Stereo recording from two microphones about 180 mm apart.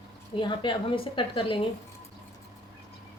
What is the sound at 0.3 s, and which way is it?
Speech, 25° left (ahead or behind).